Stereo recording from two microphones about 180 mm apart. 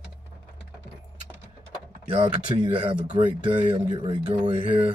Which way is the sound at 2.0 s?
30° right (ahead or behind).